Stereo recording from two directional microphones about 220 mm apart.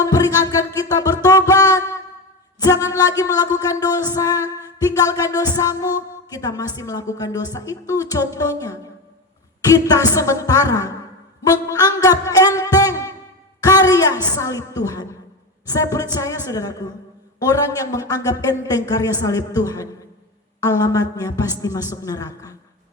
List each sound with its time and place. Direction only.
0.0 s music: 15° left (ahead or behind)
13.6 s a sound: 15° left (ahead or behind)
14.3 s music: 15° left (ahead or behind)